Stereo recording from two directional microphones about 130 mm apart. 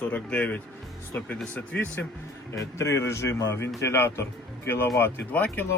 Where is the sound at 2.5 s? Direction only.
20° left (ahead or behind).